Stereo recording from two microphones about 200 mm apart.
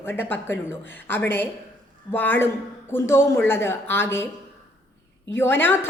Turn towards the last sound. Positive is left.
turn(degrees=10)  # may be behind; listen again after turning